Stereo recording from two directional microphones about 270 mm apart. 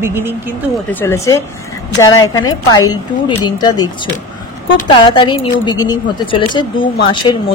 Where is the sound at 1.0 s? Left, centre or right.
Centre.